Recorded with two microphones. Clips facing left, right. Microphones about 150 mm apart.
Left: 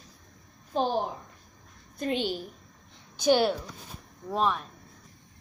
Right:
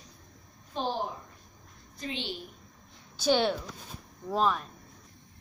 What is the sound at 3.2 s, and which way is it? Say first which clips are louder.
A woman's voice: left 3 dB; 10° left (ahead or behind).